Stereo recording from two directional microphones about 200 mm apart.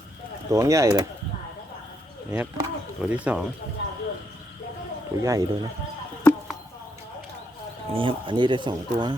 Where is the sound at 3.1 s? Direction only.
5° right (ahead or behind).